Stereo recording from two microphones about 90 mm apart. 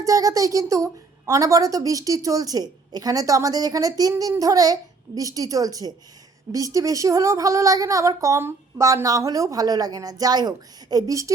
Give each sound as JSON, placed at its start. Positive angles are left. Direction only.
{"t": 0.0, "sound": "speech", "side_deg": -40}